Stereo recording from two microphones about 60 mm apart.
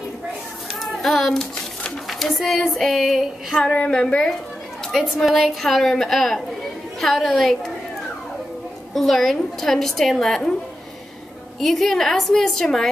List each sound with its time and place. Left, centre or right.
1.0 s a woman's voice: centre
3.5 s a woman's voice: centre
5.2 s a woman's voice: centre
8.9 s a woman's voice: centre
11.6 s a woman's voice: centre